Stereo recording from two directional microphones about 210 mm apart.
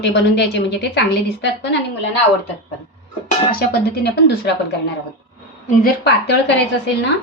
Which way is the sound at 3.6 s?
50° left (ahead or behind).